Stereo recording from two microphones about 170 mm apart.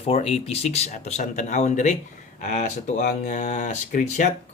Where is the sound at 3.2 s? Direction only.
50° left (ahead or behind).